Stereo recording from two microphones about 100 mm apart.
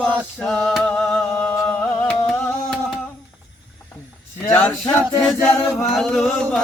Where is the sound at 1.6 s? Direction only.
15° left (ahead or behind).